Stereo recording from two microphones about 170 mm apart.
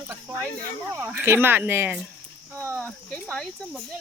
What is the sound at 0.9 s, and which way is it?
Speech, 10° right (ahead or behind).